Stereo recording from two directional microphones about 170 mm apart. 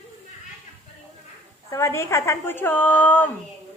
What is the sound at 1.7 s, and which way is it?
A woman's voice, 15° left (ahead or behind).